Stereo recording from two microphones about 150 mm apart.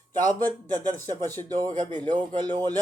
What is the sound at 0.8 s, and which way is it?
Speech, 10° left (ahead or behind).